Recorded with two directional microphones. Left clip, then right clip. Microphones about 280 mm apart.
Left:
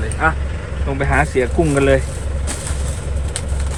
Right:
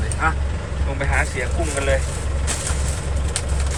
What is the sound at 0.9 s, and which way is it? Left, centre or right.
Speech, centre.